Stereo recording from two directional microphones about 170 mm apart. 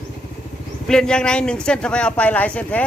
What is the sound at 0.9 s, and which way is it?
A man's voice, 5° left (ahead or behind).